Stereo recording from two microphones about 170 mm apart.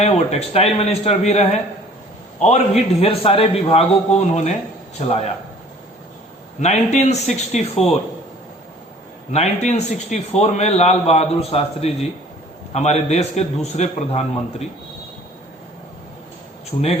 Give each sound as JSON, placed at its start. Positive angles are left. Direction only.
{"t": 0.0, "sound": "a man's voice", "side_deg": 35}
{"t": 6.6, "sound": "a man's voice", "side_deg": 40}
{"t": 9.3, "sound": "a man's voice", "side_deg": 40}